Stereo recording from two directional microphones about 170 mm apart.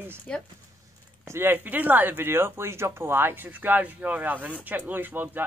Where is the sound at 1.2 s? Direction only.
15° right (ahead or behind).